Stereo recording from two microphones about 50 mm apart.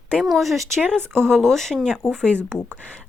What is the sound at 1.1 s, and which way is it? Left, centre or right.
Speech, centre.